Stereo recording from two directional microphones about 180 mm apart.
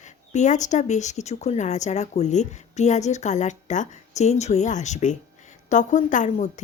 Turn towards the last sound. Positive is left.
turn(degrees=40)  # may be behind; listen again after turning